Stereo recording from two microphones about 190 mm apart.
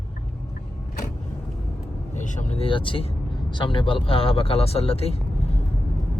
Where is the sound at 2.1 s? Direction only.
40° left (ahead or behind).